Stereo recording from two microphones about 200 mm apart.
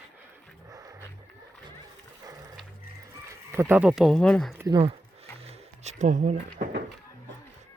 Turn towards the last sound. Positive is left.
turn(degrees=-40)  # may be behind; listen again after turning